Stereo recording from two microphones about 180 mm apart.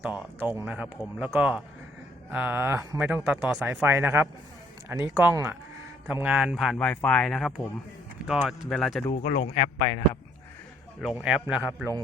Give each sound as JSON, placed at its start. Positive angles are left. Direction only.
{"t": 0.0, "sound": "speech", "side_deg": -10}
{"t": 9.4, "sound": "a man's voice", "side_deg": 60}
{"t": 11.0, "sound": "speech", "side_deg": -5}